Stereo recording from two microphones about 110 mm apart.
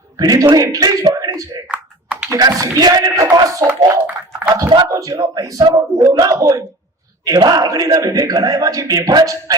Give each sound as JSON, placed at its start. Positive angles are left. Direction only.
{"t": 0.2, "sound": "a man's voice", "side_deg": -35}
{"t": 1.6, "sound": "computer keyboard", "side_deg": -10}
{"t": 2.3, "sound": "a man's voice", "side_deg": -30}
{"t": 4.3, "sound": "a sound", "side_deg": -25}
{"t": 4.9, "sound": "a man's voice", "side_deg": -30}
{"t": 7.3, "sound": "a man's voice", "side_deg": -40}